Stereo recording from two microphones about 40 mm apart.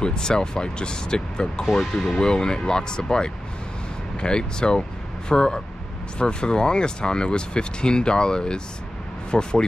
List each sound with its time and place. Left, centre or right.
0.0 s speech: centre